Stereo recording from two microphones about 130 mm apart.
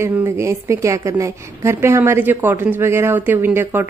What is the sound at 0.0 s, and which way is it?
A woman's voice, 20° right (ahead or behind).